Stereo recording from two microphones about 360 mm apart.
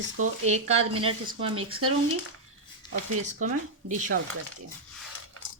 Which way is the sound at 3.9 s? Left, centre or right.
Right.